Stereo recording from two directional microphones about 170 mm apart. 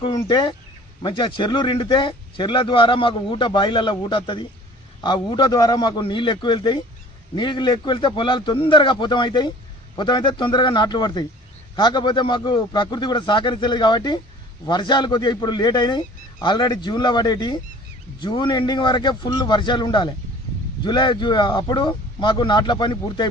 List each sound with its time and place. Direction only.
0.0 s speech: 25° left (ahead or behind)